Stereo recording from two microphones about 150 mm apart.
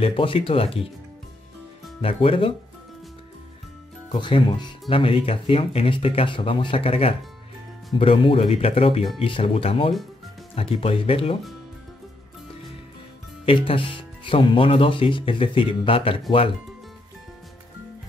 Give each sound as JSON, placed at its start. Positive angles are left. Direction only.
{"t": 0.0, "sound": "speech", "side_deg": 35}
{"t": 2.0, "sound": "speech", "side_deg": 40}
{"t": 4.2, "sound": "speech", "side_deg": 35}
{"t": 13.5, "sound": "speech", "side_deg": 35}